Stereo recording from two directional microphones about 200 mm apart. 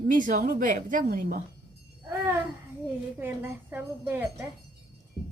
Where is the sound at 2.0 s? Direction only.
15° right (ahead or behind).